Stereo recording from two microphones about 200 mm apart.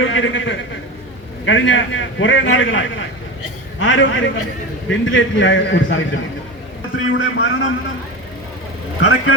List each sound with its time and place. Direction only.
0.0 s a man's voice: 70° left (ahead or behind)
7.0 s a man's voice: 70° left (ahead or behind)
9.0 s speech: 90° left